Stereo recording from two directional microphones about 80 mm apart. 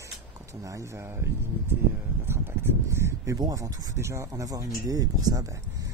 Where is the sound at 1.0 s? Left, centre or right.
Right.